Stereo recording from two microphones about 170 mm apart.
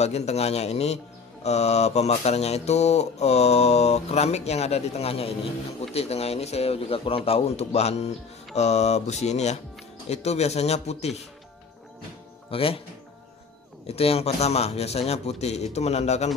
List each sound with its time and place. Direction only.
0.0 s mantra: 40° left (ahead or behind)
12.4 s speech: 35° left (ahead or behind)
13.8 s mantra: 35° left (ahead or behind)